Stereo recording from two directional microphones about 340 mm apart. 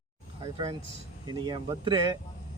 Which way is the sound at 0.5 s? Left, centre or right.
Centre.